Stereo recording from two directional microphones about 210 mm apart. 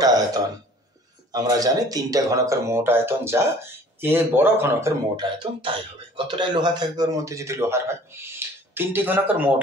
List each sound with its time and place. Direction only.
0.0 s speech: 15° right (ahead or behind)